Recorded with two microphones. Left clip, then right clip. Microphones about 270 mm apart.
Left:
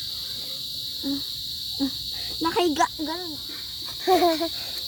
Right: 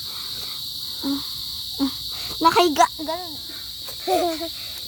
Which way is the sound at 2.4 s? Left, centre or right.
Right.